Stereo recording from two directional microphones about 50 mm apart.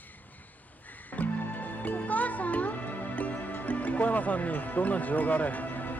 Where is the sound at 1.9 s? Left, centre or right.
Left.